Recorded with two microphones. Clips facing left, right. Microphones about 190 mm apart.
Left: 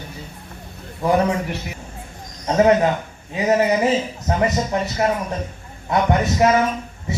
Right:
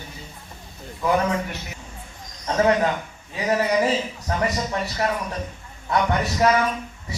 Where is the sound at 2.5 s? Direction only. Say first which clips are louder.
Left 4 dB; 25° left (ahead or behind).